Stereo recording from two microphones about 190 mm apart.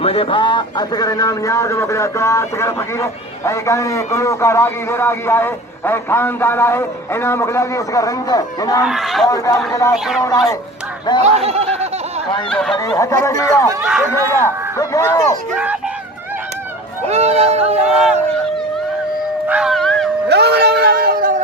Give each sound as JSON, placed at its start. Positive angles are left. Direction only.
{"t": 0.0, "sound": "a man's voice", "side_deg": 30}
{"t": 8.8, "sound": "speech", "side_deg": 0}
{"t": 9.2, "sound": "a man's voice", "side_deg": 20}
{"t": 11.2, "sound": "a sound", "side_deg": -35}
{"t": 12.5, "sound": "speech", "side_deg": 5}
{"t": 12.7, "sound": "a man's voice", "side_deg": 20}
{"t": 13.8, "sound": "speech", "side_deg": -5}
{"t": 14.3, "sound": "a man's voice", "side_deg": 15}
{"t": 15.5, "sound": "speech", "side_deg": -5}
{"t": 17.1, "sound": "a sound", "side_deg": -35}
{"t": 19.5, "sound": "dog", "side_deg": -5}
{"t": 20.2, "sound": "a sound", "side_deg": -60}